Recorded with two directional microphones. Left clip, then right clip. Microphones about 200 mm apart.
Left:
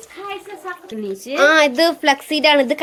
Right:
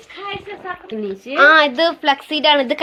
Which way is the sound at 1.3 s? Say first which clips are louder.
Right 2 dB; 25° left (ahead or behind).